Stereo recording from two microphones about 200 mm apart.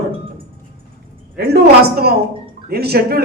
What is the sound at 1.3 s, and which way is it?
A man's voice, 50° right (ahead or behind).